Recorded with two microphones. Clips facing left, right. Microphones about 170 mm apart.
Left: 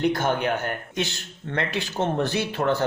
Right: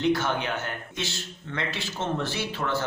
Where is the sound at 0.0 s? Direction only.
45° left (ahead or behind).